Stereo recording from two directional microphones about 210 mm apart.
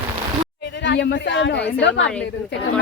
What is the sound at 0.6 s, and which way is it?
Speech, 55° left (ahead or behind).